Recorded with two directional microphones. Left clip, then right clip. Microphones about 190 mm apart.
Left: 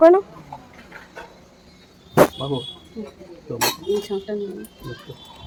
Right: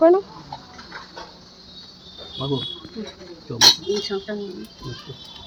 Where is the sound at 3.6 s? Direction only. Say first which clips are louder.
Right 7 dB; centre (ahead or behind).